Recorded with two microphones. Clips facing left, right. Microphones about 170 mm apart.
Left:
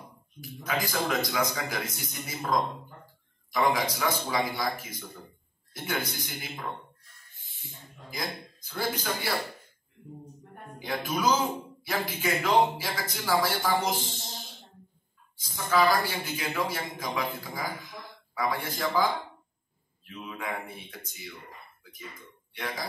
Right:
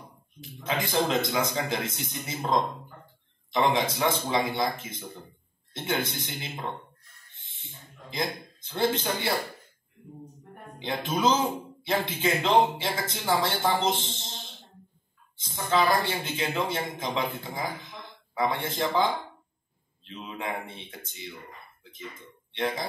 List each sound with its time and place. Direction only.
0.4 s speech: 25° right (ahead or behind)
10.8 s speech: 25° right (ahead or behind)
20.1 s speech: 25° right (ahead or behind)